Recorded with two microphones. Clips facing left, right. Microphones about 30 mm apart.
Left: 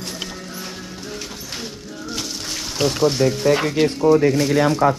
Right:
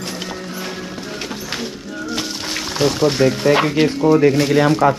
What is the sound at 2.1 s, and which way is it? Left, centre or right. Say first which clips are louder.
Music: right 3 dB; right.